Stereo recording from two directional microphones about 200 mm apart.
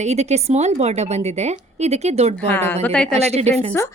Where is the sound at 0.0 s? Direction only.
35° right (ahead or behind).